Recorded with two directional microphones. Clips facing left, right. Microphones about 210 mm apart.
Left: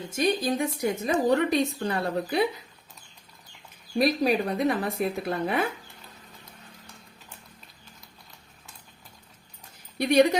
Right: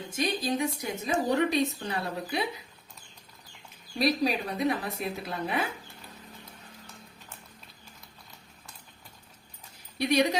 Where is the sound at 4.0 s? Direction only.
50° left (ahead or behind).